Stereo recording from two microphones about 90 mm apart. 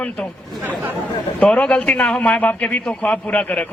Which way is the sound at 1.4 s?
15° left (ahead or behind).